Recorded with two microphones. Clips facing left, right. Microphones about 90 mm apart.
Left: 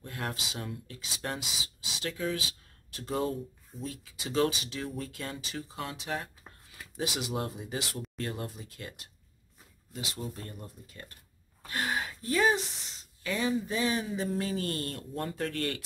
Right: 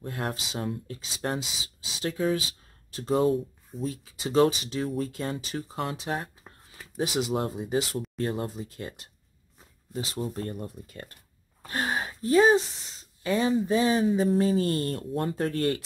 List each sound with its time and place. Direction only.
0.0 s speech: 35° right (ahead or behind)
4.8 s speech: 40° right (ahead or behind)
5.1 s speech: 30° right (ahead or behind); by 11.1 s 55° right (ahead or behind)
11.6 s a sound: 35° right (ahead or behind)
13.2 s speech: 30° right (ahead or behind)